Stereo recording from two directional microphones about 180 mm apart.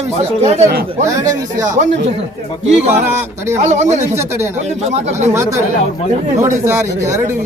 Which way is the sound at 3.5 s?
40° right (ahead or behind).